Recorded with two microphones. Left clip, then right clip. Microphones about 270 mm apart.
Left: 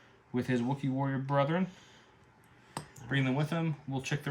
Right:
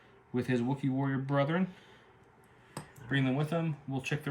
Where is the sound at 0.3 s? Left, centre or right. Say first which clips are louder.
Even; centre.